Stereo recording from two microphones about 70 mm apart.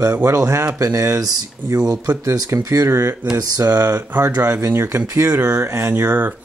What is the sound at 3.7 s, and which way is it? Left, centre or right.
Speech, right.